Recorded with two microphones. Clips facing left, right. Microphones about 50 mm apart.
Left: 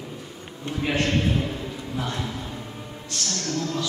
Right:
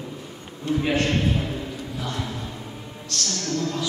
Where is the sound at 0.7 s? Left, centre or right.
Left.